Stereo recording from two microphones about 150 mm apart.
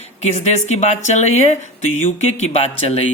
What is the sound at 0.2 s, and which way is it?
Speech, 50° left (ahead or behind).